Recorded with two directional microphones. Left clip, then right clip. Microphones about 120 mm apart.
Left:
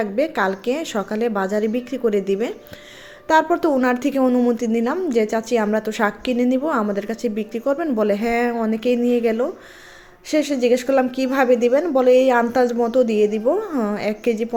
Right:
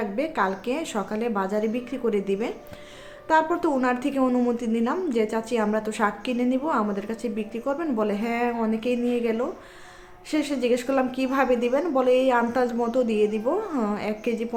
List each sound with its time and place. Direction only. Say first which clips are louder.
0.0 s a woman's voice: left 5 dB; 40° left (ahead or behind)